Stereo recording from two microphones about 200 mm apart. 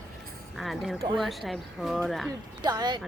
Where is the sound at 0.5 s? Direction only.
Centre (ahead or behind).